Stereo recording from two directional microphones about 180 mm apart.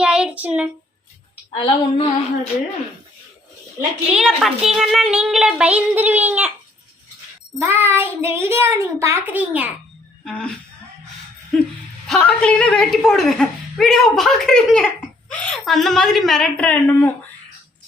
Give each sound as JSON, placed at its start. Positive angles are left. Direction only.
{"t": 0.0, "sound": "child singing", "side_deg": -5}
{"t": 1.5, "sound": "female singing", "side_deg": 35}
{"t": 4.1, "sound": "speech", "side_deg": -5}
{"t": 7.6, "sound": "a child's voice", "side_deg": -10}
{"t": 10.2, "sound": "speech", "side_deg": 5}
{"t": 11.5, "sound": "a woman's voice", "side_deg": 0}